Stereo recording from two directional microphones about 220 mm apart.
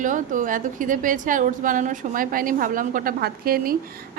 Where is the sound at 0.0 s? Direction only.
35° right (ahead or behind).